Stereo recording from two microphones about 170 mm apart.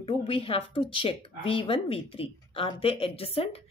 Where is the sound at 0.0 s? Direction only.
35° left (ahead or behind).